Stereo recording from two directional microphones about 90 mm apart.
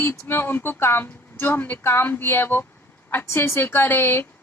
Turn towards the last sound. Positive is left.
turn(degrees=25)  # may be behind; listen again after turning